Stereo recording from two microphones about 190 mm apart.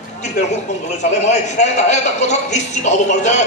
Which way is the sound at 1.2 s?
35° left (ahead or behind).